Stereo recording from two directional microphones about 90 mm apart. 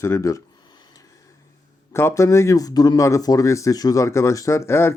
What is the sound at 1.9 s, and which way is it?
Speech, 30° left (ahead or behind).